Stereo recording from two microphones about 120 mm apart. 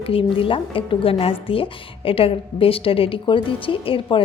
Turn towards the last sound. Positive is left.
turn(degrees=45)  # may be behind; listen again after turning